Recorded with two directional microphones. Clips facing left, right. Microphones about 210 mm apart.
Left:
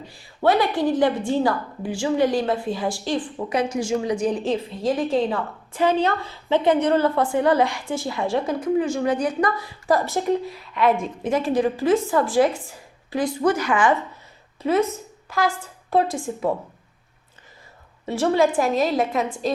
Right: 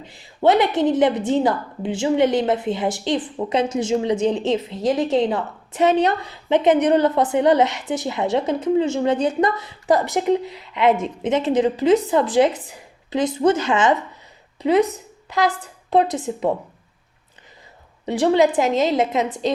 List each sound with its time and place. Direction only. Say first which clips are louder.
0.0 s a woman's voice: right 3 dB; 20° right (ahead or behind)
18.0 s a woman's voice: right 3 dB; 20° right (ahead or behind)